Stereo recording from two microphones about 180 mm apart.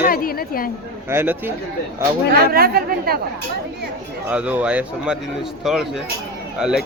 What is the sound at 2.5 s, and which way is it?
Speech, 55° right (ahead or behind).